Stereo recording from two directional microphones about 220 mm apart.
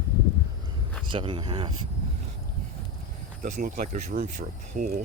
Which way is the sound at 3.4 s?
40° right (ahead or behind).